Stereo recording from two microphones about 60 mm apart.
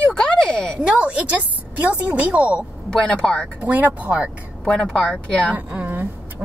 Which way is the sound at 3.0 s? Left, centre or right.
Centre.